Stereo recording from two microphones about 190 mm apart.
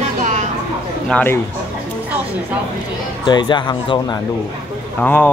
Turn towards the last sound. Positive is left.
turn(degrees=10)  # may be behind; listen again after turning